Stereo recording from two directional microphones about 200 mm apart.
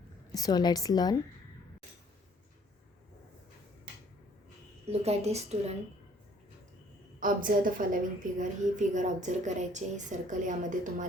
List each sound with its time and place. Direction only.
0.3 s a woman's voice: 20° left (ahead or behind)
4.9 s a woman's voice: 30° right (ahead or behind)
7.2 s a woman's voice: 40° right (ahead or behind)